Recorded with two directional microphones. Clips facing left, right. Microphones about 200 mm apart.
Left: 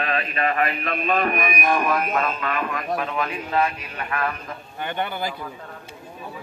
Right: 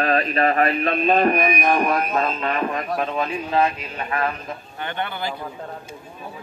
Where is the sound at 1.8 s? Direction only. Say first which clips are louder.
Right 2 dB; 30° right (ahead or behind).